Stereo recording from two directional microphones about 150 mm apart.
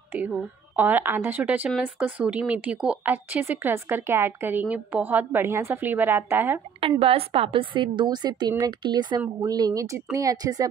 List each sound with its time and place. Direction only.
0.1 s a woman's voice: 10° right (ahead or behind)
6.8 s a woman's voice: 40° right (ahead or behind)